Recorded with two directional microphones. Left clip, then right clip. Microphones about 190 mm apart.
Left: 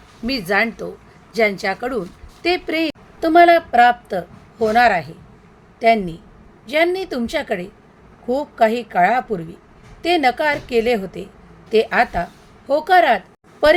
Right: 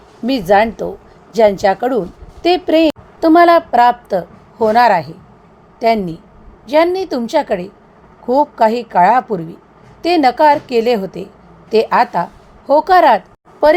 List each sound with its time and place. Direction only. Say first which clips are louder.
0.3 s a woman's voice: right 7 dB; 15° right (ahead or behind)